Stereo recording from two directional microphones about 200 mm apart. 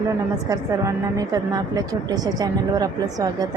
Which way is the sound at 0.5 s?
15° right (ahead or behind).